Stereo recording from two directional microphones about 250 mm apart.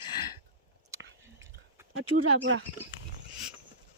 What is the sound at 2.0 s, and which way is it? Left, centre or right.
Speech, right.